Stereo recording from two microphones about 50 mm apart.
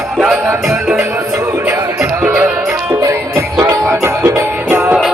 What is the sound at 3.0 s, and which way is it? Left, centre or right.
Music, right.